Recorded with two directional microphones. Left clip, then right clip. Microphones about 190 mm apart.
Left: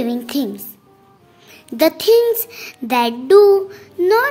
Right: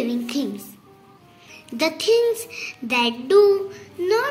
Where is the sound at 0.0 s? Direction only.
50° left (ahead or behind).